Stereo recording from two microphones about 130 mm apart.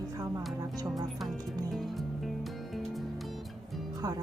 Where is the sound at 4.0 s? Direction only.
30° right (ahead or behind).